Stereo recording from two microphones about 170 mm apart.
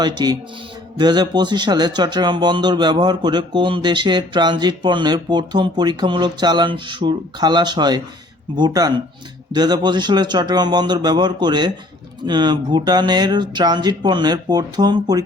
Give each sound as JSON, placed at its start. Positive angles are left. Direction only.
{"t": 0.0, "sound": "speech", "side_deg": -25}